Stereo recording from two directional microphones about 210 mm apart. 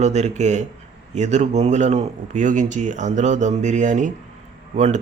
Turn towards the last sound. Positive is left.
turn(degrees=-35)  # may be behind; listen again after turning